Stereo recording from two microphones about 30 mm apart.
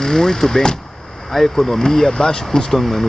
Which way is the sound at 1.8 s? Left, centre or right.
Centre.